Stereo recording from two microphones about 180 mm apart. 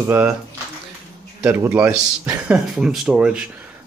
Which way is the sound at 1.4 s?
10° right (ahead or behind).